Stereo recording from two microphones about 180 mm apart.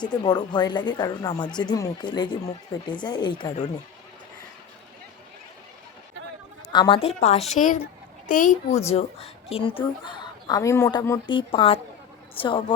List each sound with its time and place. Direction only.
0.0 s a woman's voice: 25° left (ahead or behind)
6.7 s a woman's voice: 25° left (ahead or behind)